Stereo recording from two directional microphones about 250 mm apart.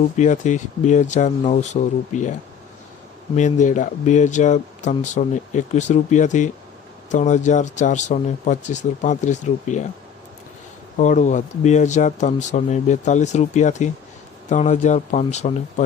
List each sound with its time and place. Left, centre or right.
0.2 s speech: left
3.3 s speech: left
10.9 s speech: left